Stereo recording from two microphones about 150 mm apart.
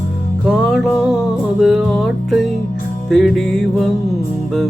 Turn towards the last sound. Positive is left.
turn(degrees=0)  # may be behind; listen again after turning